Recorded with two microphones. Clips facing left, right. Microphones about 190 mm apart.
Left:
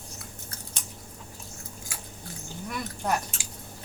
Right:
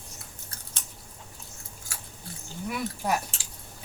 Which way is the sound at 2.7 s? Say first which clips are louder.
Right 1 dB; 5° right (ahead or behind).